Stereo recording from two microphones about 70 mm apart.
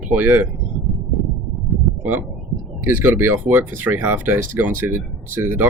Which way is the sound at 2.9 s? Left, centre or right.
Right.